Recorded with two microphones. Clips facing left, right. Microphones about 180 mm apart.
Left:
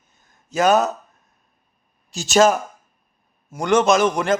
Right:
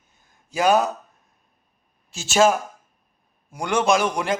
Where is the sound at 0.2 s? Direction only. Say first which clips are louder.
Left 3 dB; 10° right (ahead or behind).